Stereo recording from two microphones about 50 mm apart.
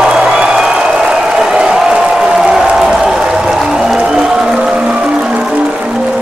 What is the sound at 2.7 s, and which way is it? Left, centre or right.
Music, centre.